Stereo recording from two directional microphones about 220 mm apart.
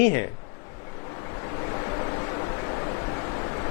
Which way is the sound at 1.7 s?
25° left (ahead or behind).